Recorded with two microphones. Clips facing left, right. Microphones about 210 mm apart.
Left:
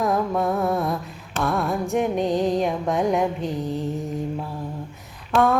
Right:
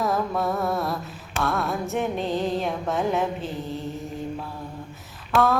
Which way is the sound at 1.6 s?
Centre (ahead or behind).